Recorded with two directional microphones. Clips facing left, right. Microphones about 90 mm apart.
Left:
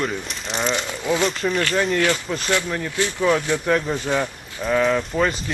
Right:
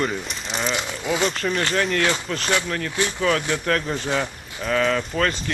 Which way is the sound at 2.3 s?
15° left (ahead or behind).